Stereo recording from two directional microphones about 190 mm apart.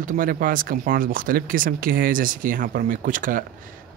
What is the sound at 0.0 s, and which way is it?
Speech, 45° right (ahead or behind).